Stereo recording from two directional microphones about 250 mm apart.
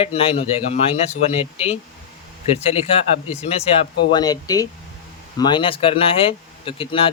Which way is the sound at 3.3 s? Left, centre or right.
Left.